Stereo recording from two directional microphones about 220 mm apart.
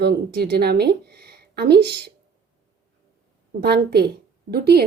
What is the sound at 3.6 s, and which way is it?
A woman's voice, 45° right (ahead or behind).